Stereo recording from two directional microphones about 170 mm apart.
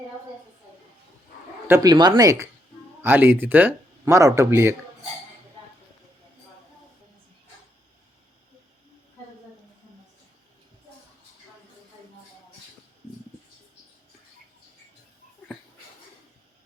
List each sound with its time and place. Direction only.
1.6 s speech: 20° right (ahead or behind)